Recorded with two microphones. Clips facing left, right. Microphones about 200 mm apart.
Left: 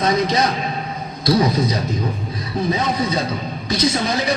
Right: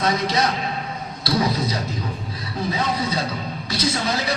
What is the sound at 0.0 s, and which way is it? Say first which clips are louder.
Speech: left 3 dB; 20° left (ahead or behind).